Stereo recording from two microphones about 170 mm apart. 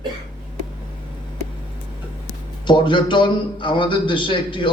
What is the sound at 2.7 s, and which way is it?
A man's voice, 30° left (ahead or behind).